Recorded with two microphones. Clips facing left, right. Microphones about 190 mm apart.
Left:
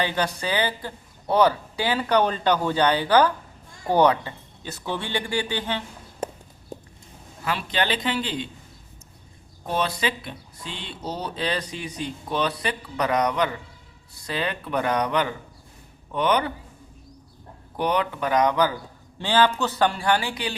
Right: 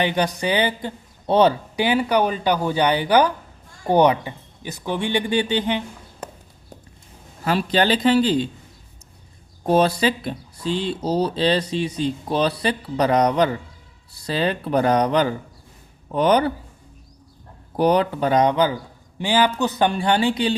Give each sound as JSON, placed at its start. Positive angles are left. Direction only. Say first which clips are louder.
{"t": 0.0, "sound": "speech", "louder": "right 4 dB", "side_deg": -15}
{"t": 7.4, "sound": "speech", "louder": "right 7 dB", "side_deg": -40}
{"t": 9.6, "sound": "speech", "louder": "right 8 dB", "side_deg": -40}
{"t": 17.7, "sound": "speech", "louder": "right 6 dB", "side_deg": -35}